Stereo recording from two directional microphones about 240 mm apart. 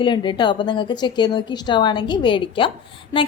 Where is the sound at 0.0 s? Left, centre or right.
Centre.